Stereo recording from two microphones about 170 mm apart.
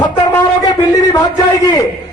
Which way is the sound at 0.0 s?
20° left (ahead or behind).